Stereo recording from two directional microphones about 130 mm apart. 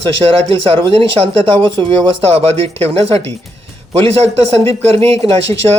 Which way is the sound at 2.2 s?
50° right (ahead or behind).